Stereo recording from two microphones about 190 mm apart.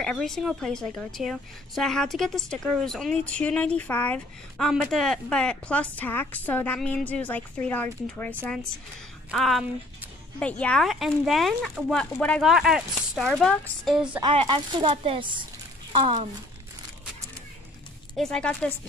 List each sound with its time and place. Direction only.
0.0 s a woman's voice: 5° left (ahead or behind)
14.2 s speech: 30° right (ahead or behind)
18.1 s a woman's voice: 5° left (ahead or behind)